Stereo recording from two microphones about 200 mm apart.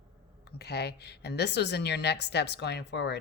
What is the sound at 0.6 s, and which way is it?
A woman's voice, 55° left (ahead or behind).